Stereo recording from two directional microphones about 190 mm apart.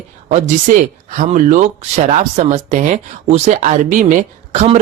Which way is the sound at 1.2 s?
40° right (ahead or behind).